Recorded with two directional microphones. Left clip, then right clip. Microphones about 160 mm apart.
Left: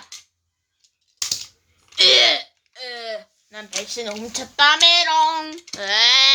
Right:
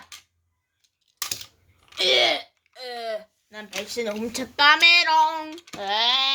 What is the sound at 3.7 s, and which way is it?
Speech, centre (ahead or behind).